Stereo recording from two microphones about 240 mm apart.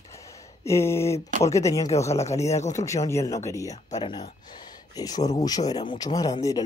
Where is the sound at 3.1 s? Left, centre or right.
Centre.